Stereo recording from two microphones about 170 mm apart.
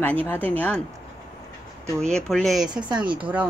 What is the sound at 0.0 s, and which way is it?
Speech, 10° left (ahead or behind).